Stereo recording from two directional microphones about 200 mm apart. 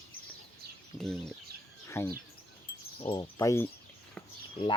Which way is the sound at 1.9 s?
10° left (ahead or behind).